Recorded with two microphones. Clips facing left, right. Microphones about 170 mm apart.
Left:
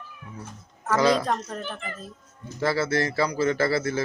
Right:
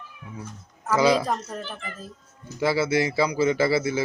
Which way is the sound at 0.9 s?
5° right (ahead or behind).